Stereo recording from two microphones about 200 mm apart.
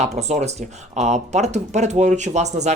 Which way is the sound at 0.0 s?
35° right (ahead or behind).